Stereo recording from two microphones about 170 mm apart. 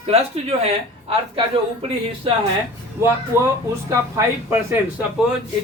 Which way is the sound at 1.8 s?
30° right (ahead or behind).